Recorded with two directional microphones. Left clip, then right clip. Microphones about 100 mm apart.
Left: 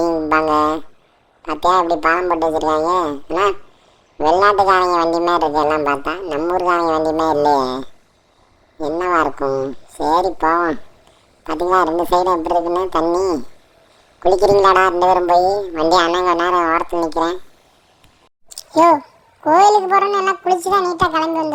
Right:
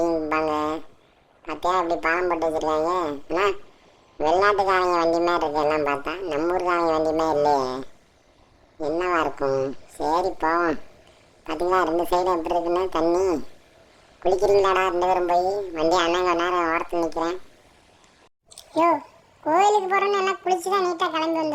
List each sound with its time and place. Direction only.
0.0 s a sound: 10° left (ahead or behind)
0.3 s a sound: 45° left (ahead or behind)
1.4 s speech: 35° left (ahead or behind)
4.2 s a man's voice: 35° left (ahead or behind)
9.0 s a man's voice: 25° left (ahead or behind)
9.3 s speech: 5° left (ahead or behind)
10.0 s a man's voice: 30° left (ahead or behind)
10.5 s speech: 5° left (ahead or behind)
11.4 s a man's voice: 30° left (ahead or behind)
19.4 s a man's voice: 25° left (ahead or behind)